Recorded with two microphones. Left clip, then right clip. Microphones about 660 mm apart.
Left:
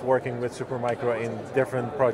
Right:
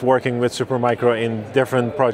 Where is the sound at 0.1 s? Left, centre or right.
Right.